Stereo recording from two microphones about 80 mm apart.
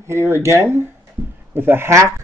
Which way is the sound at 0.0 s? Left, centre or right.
Right.